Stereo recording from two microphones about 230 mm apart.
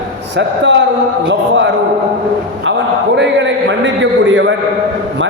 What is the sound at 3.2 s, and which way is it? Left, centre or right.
A man's voice, right.